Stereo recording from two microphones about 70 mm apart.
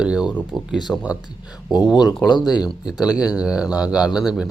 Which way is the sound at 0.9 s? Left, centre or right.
Left.